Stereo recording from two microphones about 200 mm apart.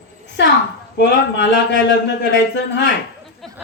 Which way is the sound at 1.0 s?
60° left (ahead or behind).